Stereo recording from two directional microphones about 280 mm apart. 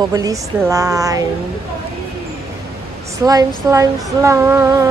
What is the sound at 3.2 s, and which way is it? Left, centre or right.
Speech, centre.